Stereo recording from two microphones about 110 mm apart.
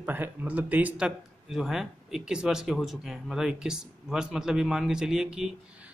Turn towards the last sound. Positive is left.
turn(degrees=-5)  # may be behind; listen again after turning